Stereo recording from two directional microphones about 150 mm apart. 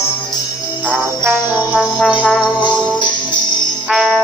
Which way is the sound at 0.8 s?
10° right (ahead or behind).